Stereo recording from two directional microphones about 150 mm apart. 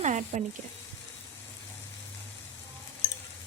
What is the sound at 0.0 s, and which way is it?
Sizzle, 50° right (ahead or behind).